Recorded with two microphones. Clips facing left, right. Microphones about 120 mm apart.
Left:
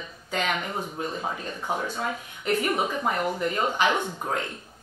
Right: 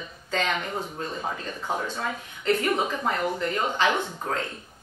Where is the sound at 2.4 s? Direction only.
10° left (ahead or behind).